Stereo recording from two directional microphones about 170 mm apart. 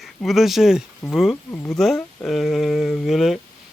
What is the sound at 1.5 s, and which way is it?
Speech, 15° left (ahead or behind).